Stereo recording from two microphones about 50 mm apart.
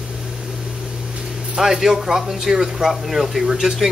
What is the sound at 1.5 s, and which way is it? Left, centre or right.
Speech, centre.